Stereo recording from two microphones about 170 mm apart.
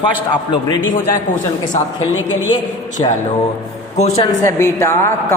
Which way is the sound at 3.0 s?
25° left (ahead or behind).